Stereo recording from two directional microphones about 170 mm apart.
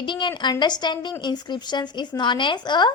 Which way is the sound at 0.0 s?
25° left (ahead or behind).